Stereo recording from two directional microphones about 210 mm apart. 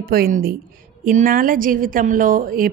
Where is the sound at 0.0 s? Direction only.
45° right (ahead or behind).